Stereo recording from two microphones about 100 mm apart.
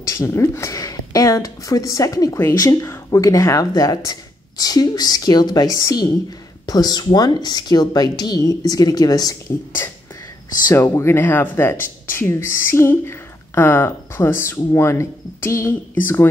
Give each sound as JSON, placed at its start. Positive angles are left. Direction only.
{"t": 0.0, "sound": "speech", "side_deg": 30}
{"t": 9.8, "sound": "speech", "side_deg": 25}